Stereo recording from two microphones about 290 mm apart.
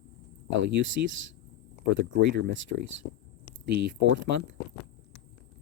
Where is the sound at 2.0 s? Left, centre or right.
Right.